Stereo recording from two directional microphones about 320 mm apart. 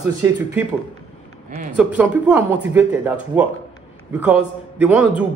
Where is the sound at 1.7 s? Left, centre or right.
Centre.